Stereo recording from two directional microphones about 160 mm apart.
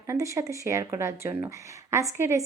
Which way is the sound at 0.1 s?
20° right (ahead or behind).